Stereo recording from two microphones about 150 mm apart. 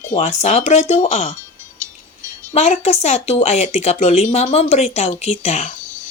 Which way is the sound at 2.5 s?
45° left (ahead or behind).